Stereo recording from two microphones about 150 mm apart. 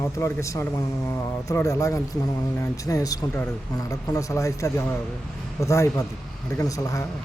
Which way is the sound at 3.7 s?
25° left (ahead or behind).